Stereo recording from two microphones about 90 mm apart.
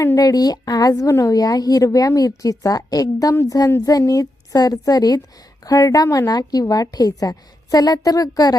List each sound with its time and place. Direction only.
0.2 s a woman's voice: 45° left (ahead or behind)